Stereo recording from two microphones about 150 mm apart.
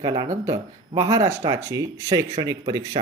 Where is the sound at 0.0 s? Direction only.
20° right (ahead or behind).